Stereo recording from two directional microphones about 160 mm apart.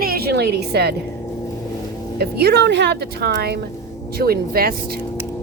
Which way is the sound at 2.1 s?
85° right.